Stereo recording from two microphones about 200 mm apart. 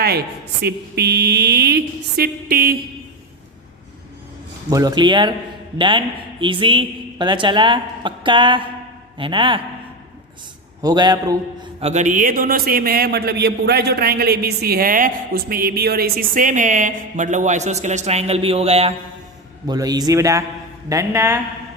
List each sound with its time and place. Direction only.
0.6 s a woman's voice: 55° right (ahead or behind)
4.7 s a woman's voice: 20° right (ahead or behind)
10.8 s a woman's voice: 20° right (ahead or behind)
11.8 s a man's voice: 35° right (ahead or behind)
19.6 s a woman's voice: 20° right (ahead or behind)